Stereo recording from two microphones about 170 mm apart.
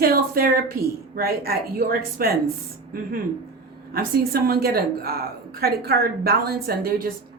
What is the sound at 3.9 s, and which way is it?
A woman's voice, 60° right (ahead or behind).